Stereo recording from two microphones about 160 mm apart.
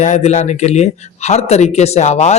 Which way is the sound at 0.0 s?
45° left (ahead or behind).